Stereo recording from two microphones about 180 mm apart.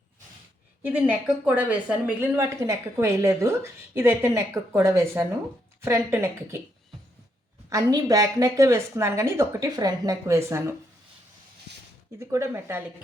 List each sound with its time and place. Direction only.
0.8 s speech: 10° right (ahead or behind)
7.7 s speech: 20° right (ahead or behind)
12.2 s speech: 15° right (ahead or behind)